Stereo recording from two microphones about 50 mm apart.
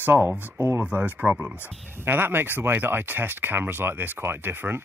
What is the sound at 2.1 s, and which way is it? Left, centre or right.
Speech, right.